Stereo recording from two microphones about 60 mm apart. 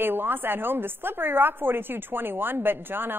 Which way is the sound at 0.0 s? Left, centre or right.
Right.